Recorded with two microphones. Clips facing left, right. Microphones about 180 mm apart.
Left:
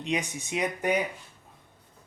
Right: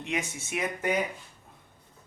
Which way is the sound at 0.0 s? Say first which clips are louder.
Left 3 dB; 15° left (ahead or behind).